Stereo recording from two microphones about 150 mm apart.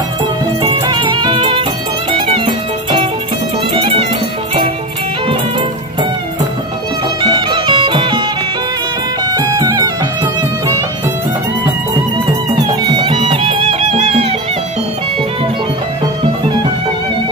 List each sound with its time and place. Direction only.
0.6 s music: 30° right (ahead or behind)
7.2 s music: 30° right (ahead or behind)
9.3 s music: 25° right (ahead or behind)
12.8 s music: 30° right (ahead or behind)